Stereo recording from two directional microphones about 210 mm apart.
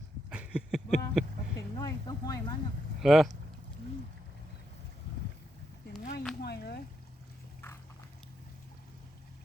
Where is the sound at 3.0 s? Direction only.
Centre (ahead or behind).